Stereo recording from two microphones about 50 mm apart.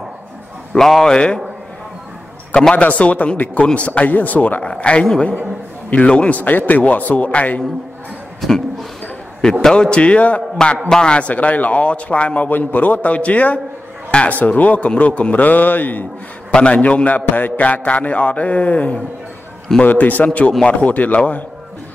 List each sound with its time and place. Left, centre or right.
0.7 s a man's voice: centre
1.1 s speech: centre
2.7 s a man's voice: left
8.4 s a sound: centre
9.0 s a man's voice: centre
12.4 s a man's voice: left
16.5 s speech: left
17.3 s a man's voice: left